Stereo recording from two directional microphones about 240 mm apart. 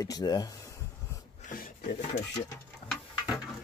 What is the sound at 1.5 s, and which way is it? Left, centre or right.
Wood, left.